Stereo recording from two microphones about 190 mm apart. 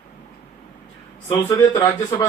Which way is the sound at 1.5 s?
20° left (ahead or behind).